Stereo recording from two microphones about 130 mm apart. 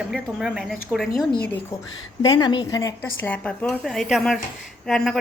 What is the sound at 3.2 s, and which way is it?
Speech, 10° left (ahead or behind).